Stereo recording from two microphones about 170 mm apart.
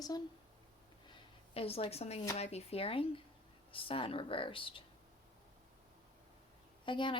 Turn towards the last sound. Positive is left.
turn(degrees=30)  # may be behind; listen again after turning